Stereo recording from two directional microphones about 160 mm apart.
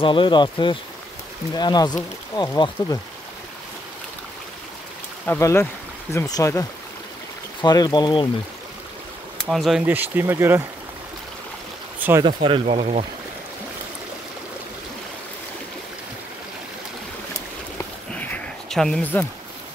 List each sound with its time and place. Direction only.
0.0 s speech: 30° left (ahead or behind)
5.2 s speech: 15° left (ahead or behind)
7.6 s speech: 25° left (ahead or behind)
9.4 s speech: centre (ahead or behind)
12.2 s speech: 30° right (ahead or behind)
18.1 s a sound: 10° left (ahead or behind)